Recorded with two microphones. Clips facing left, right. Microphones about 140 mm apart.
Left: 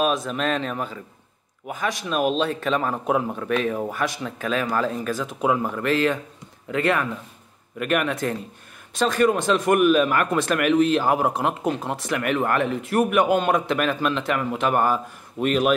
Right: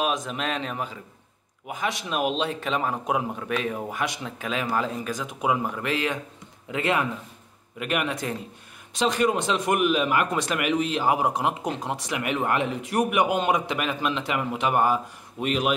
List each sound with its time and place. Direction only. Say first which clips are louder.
0.0 s a man's voice: left 4 dB; 15° right (ahead or behind)
8.1 s speech: left 4 dB; 50° left (ahead or behind)
8.9 s speech: left 3 dB; 20° right (ahead or behind)